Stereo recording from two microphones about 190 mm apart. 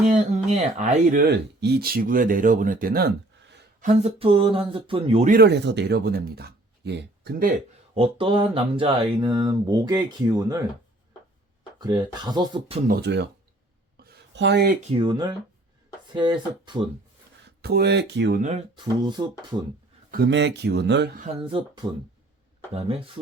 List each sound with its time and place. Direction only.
0.0 s speech: 35° right (ahead or behind)
1.3 s speech: 55° right (ahead or behind)
3.8 s speech: 40° right (ahead or behind)
5.3 s speech: 60° right (ahead or behind)
7.9 s speech: 30° right (ahead or behind)
11.8 s speech: 20° right (ahead or behind)
12.9 s a man's voice: 65° right (ahead or behind)
13.9 s a sound: 55° right (ahead or behind)
14.8 s speech: 25° right (ahead or behind)
17.6 s a man's voice: 55° right (ahead or behind)
19.0 s speech: 25° right (ahead or behind)
20.1 s a man's voice: 55° right (ahead or behind)
21.4 s speech: 25° right (ahead or behind)